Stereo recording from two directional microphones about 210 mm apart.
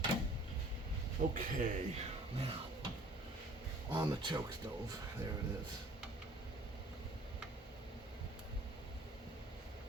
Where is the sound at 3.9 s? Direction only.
20° right (ahead or behind).